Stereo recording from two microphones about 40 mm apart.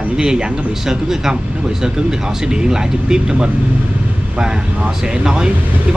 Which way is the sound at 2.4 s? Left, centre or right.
Centre.